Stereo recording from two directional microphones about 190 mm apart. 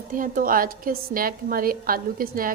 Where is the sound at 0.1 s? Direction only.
45° right (ahead or behind).